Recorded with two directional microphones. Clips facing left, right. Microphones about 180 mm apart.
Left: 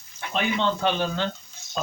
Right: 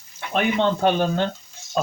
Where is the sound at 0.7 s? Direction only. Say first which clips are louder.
Right 5 dB; 45° right (ahead or behind).